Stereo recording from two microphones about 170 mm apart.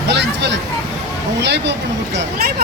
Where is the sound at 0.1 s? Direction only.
90° right.